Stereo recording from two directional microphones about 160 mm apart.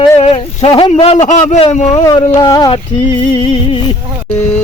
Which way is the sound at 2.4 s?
25° left (ahead or behind).